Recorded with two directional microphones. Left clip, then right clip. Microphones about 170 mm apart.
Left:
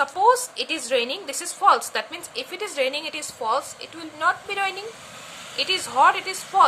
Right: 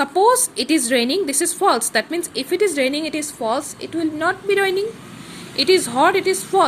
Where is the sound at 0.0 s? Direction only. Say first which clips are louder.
Right 3 dB; 25° right (ahead or behind).